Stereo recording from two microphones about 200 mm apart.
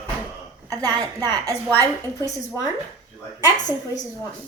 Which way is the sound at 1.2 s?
20° right (ahead or behind).